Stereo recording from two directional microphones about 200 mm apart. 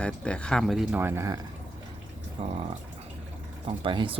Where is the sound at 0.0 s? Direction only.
5° left (ahead or behind); by 1.4 s 15° right (ahead or behind).